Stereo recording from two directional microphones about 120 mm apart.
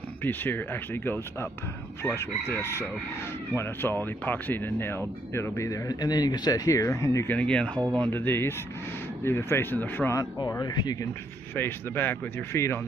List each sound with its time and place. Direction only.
0.2 s speech: 15° left (ahead or behind)
7.3 s speech: 10° left (ahead or behind)
7.7 s speech: 30° right (ahead or behind)
8.1 s speech: 20° left (ahead or behind)
10.1 s speech: 30° left (ahead or behind)
11.5 s speech: 20° left (ahead or behind)